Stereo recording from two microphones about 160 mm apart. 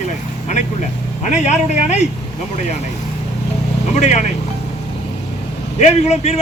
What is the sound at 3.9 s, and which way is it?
Speech, 45° left (ahead or behind).